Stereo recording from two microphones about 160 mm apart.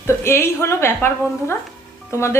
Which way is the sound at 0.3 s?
15° left (ahead or behind).